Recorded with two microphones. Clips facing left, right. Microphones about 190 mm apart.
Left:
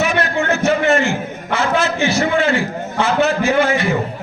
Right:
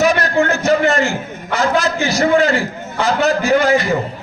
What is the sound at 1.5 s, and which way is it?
Speech, 40° right (ahead or behind).